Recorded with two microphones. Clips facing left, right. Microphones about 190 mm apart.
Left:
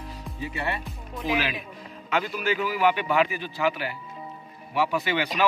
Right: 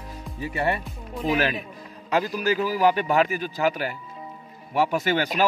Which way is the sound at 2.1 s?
40° right (ahead or behind).